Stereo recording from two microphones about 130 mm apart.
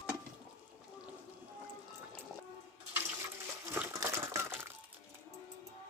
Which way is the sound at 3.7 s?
20° right (ahead or behind).